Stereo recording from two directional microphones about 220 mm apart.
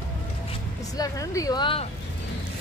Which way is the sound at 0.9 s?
15° left (ahead or behind).